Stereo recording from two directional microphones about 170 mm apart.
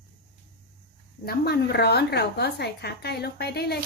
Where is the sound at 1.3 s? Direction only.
70° left (ahead or behind).